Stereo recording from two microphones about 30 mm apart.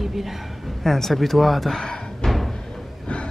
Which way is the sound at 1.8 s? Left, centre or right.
Left.